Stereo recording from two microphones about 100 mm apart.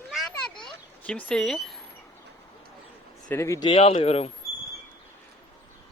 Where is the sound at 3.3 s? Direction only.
30° left (ahead or behind).